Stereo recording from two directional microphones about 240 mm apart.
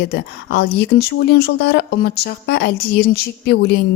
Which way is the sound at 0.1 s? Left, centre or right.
Left.